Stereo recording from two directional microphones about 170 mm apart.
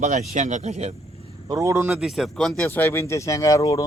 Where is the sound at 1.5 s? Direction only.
20° right (ahead or behind).